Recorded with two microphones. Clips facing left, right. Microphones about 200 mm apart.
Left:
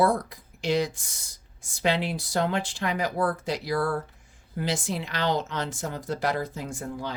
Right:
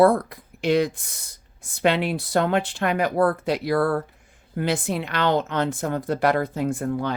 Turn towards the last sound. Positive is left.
turn(degrees=-60)  # may be behind; listen again after turning